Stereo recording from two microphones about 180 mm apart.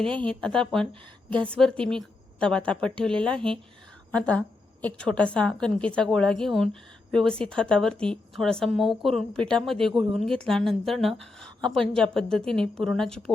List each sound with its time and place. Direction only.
0.0 s a woman's voice: 5° left (ahead or behind)